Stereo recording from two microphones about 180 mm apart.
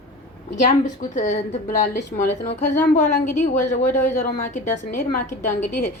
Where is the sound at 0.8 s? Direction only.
45° left (ahead or behind).